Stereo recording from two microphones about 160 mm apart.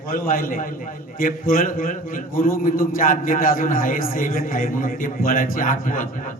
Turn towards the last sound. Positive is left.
turn(degrees=55)  # may be behind; listen again after turning